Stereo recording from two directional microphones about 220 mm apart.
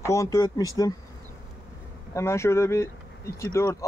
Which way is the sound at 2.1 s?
10° left (ahead or behind).